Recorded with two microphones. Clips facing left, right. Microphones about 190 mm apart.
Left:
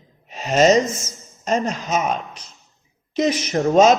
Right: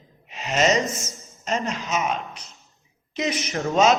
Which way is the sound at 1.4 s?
40° left (ahead or behind).